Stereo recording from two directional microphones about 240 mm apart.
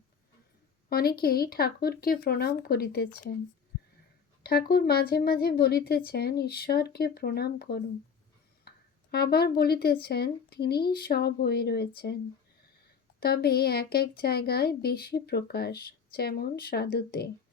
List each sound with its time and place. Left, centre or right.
0.9 s speech: left
4.4 s speech: left